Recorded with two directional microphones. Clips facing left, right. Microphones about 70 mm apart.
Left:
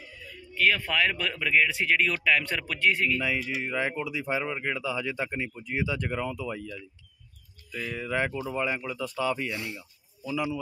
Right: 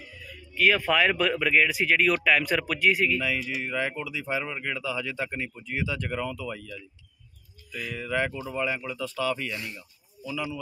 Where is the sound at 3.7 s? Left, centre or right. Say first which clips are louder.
Left 1 dB; centre.